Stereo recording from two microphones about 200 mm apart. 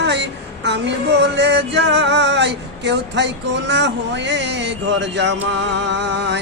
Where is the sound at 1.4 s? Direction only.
60° right (ahead or behind).